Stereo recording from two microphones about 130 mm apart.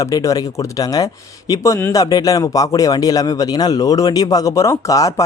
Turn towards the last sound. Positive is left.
turn(degrees=25)  # may be behind; listen again after turning